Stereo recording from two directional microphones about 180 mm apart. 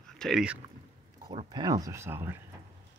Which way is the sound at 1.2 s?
25° right (ahead or behind).